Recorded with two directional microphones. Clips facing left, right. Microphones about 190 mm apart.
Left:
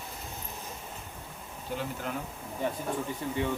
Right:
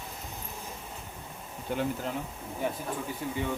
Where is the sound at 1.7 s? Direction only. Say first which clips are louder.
Right 4 dB; 55° right (ahead or behind).